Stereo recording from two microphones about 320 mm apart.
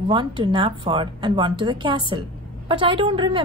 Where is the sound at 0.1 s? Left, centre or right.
Centre.